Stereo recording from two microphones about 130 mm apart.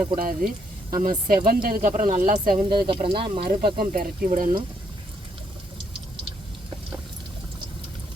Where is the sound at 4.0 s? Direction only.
90° right.